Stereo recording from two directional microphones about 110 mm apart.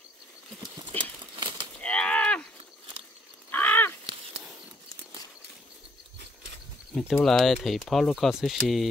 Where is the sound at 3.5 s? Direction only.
15° left (ahead or behind).